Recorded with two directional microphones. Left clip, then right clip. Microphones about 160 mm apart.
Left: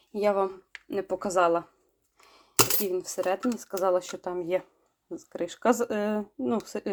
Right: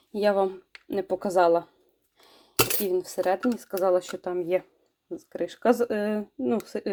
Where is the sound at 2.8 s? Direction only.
10° right (ahead or behind).